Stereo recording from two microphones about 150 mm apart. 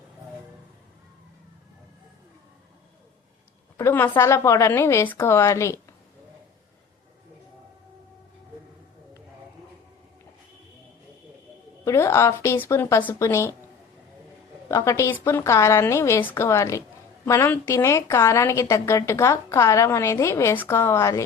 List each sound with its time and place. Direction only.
3.8 s a woman's voice: 15° left (ahead or behind)
11.9 s a woman's voice: 20° left (ahead or behind)
14.7 s a woman's voice: 20° left (ahead or behind)